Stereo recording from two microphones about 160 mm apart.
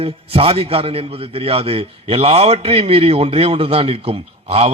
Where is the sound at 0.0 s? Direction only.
35° right (ahead or behind).